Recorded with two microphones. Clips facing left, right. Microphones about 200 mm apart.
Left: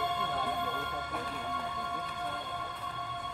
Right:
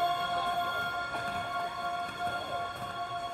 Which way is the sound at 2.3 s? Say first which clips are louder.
Right 3 dB; 45° right (ahead or behind).